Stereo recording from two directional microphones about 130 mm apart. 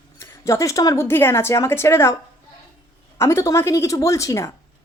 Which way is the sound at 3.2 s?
25° left (ahead or behind).